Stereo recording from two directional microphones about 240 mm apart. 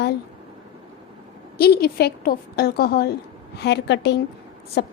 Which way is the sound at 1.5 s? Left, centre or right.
Left.